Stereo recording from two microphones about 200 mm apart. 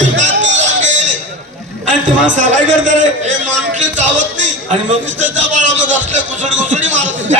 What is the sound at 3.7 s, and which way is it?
Music, 35° right (ahead or behind).